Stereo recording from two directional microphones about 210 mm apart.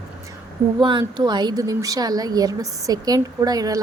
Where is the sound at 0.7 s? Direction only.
20° right (ahead or behind).